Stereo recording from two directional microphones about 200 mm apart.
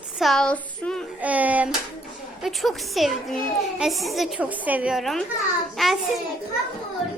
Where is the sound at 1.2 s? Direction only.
5° right (ahead or behind).